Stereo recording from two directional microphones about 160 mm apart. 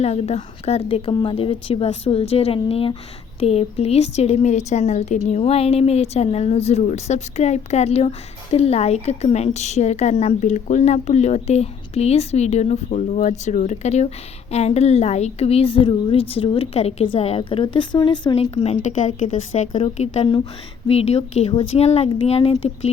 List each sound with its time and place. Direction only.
0.0 s a woman's voice: 40° left (ahead or behind)
18.5 s a woman's voice: 45° left (ahead or behind)